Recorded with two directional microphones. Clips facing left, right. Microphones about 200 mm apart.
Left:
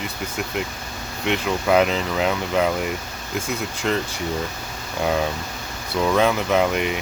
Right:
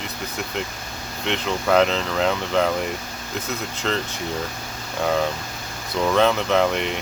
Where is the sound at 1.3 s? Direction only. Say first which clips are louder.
Left 1 dB; 10° left (ahead or behind).